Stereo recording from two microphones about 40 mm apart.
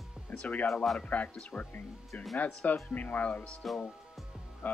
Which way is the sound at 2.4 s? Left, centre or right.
Left.